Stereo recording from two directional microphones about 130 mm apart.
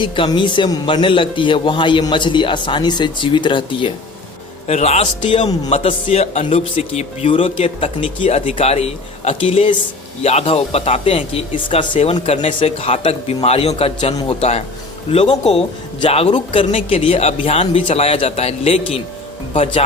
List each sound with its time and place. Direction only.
0.0 s a man's voice: 40° left (ahead or behind)
4.7 s a man's voice: 55° left (ahead or behind)